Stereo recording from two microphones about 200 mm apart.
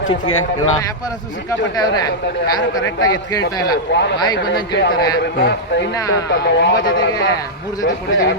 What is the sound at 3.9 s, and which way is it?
A man's voice, 60° left (ahead or behind).